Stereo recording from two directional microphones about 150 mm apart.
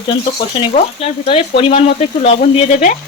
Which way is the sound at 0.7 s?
45° left (ahead or behind).